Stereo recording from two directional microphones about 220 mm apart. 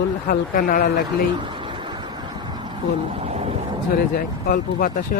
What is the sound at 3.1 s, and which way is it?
Boat, 30° right (ahead or behind).